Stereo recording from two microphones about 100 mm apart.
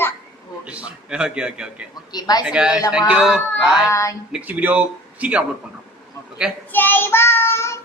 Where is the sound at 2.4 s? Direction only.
10° right (ahead or behind).